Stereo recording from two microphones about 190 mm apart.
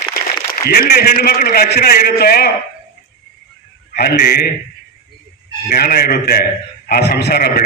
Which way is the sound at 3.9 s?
55° left (ahead or behind).